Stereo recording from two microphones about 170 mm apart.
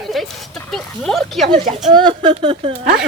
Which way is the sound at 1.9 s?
25° right (ahead or behind).